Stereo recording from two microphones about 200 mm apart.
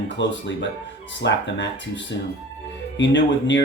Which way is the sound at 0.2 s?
65° left (ahead or behind).